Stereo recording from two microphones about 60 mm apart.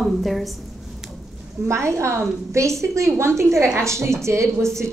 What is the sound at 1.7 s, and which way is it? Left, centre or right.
A woman's voice, right.